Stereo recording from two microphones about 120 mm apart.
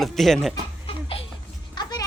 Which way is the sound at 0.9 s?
50° left (ahead or behind).